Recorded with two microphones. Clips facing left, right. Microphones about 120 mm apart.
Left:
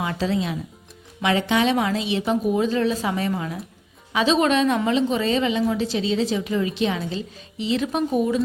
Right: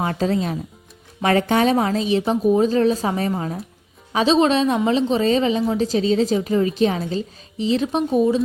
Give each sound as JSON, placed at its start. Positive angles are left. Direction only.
{"t": 0.0, "sound": "a woman's voice", "side_deg": -45}